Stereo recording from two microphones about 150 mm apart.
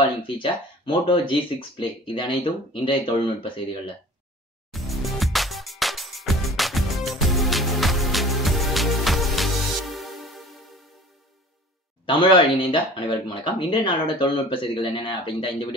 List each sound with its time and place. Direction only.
0.0 s speech: 35° left (ahead or behind)
4.6 s music: centre (ahead or behind)
12.1 s speech: 35° left (ahead or behind)